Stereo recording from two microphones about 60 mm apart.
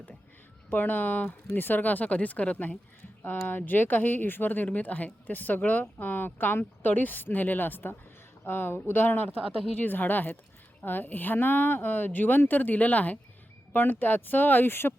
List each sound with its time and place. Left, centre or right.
0.7 s speech: left